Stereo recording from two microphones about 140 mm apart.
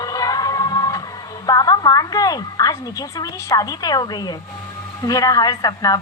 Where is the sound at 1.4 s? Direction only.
25° left (ahead or behind).